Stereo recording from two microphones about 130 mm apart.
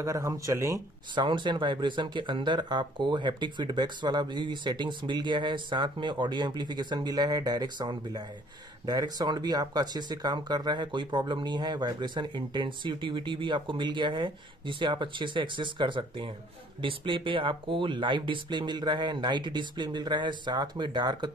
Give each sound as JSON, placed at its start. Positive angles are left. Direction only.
{"t": 0.0, "sound": "speech", "side_deg": -25}
{"t": 1.1, "sound": "speech", "side_deg": -35}